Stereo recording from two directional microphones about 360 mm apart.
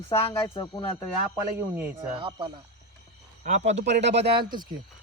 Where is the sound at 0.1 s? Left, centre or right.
Centre.